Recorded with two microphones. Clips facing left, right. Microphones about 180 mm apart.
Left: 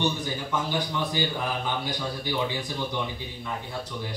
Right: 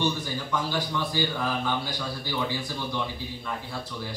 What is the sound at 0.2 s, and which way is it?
A man's voice, 20° left (ahead or behind).